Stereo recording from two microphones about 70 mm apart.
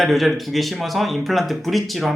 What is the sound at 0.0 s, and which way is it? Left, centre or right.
Speech, centre.